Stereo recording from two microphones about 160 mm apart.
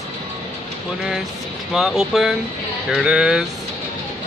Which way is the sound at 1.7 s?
Centre (ahead or behind).